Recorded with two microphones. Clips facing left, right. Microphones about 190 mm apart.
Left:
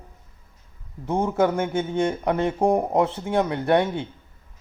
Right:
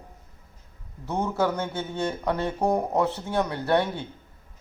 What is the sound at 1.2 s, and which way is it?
Speech, 15° left (ahead or behind).